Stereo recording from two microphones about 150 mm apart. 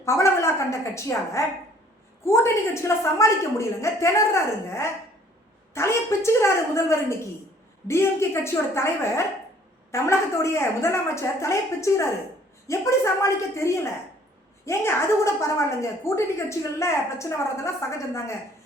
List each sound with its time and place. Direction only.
0.0 s a woman's voice: 20° left (ahead or behind)
5.7 s a woman's voice: 20° left (ahead or behind)